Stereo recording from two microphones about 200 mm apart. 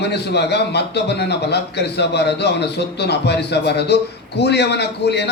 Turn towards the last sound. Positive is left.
turn(degrees=55)  # may be behind; listen again after turning